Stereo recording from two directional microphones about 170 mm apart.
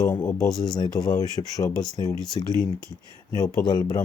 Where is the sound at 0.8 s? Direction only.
25° left (ahead or behind).